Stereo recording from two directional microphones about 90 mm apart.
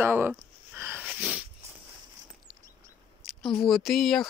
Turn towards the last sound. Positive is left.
turn(degrees=0)  # may be behind; listen again after turning